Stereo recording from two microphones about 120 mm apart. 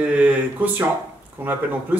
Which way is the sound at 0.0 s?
10° right (ahead or behind).